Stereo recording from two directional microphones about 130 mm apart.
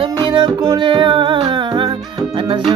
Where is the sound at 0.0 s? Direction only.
40° right (ahead or behind).